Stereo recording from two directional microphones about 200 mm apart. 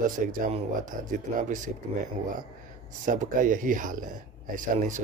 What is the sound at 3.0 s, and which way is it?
Speech, 40° right (ahead or behind).